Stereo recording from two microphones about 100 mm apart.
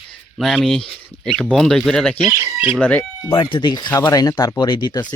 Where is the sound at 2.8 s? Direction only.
15° left (ahead or behind).